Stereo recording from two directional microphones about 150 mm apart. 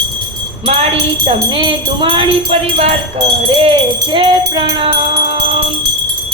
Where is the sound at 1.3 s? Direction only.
30° right (ahead or behind).